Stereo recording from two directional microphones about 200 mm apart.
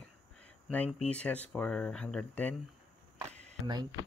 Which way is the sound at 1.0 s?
5° left (ahead or behind).